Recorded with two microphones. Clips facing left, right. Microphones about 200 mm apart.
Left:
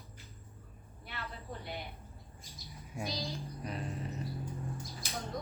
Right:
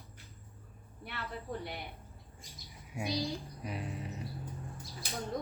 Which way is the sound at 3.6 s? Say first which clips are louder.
Left 1 dB; 10° right (ahead or behind).